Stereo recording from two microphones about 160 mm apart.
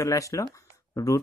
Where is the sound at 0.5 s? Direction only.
20° left (ahead or behind).